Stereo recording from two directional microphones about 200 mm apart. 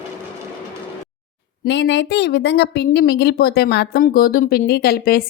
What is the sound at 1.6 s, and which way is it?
A woman's voice, 65° left (ahead or behind).